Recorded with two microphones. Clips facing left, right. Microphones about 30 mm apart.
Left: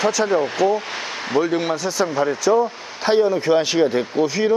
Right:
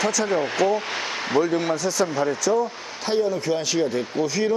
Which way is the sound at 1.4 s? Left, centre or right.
Centre.